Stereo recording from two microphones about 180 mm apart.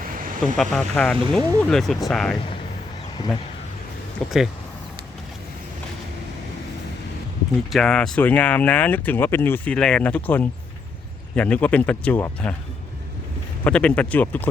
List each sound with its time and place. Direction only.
0.2 s vehicle: 50° right (ahead or behind)
0.5 s speech: centre (ahead or behind)
4.2 s speech: centre (ahead or behind)
7.7 s speech: 5° left (ahead or behind)
13.7 s speech: 5° left (ahead or behind)